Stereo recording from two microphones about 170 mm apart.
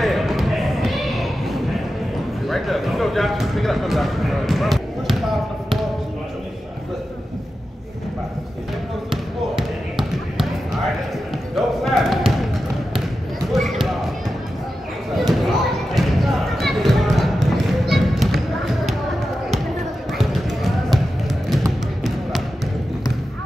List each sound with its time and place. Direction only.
0.0 s basketball bounce: centre (ahead or behind)
2.4 s a sound: centre (ahead or behind)
9.1 s basketball bounce: centre (ahead or behind)
11.5 s basketball bounce: centre (ahead or behind)
13.5 s basketball bounce: centre (ahead or behind)
15.1 s basketball bounce: centre (ahead or behind)
20.2 s basketball bounce: centre (ahead or behind)
21.5 s music: centre (ahead or behind)